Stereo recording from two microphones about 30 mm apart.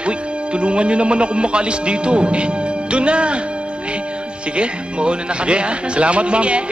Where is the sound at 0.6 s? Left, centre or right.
Right.